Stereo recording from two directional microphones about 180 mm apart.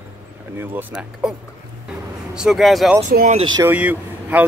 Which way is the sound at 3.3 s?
25° right (ahead or behind).